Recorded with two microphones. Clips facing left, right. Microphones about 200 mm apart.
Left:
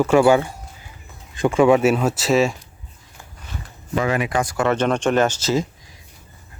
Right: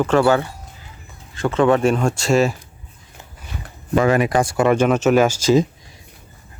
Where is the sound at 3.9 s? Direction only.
45° right (ahead or behind); by 4.7 s 30° right (ahead or behind).